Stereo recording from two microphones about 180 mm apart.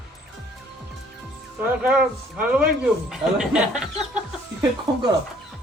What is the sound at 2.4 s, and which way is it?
Speech, 5° right (ahead or behind).